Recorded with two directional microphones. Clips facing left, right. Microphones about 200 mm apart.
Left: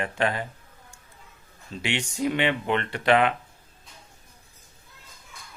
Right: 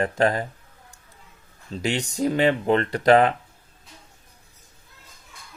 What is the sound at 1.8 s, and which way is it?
A man's voice, 40° right (ahead or behind).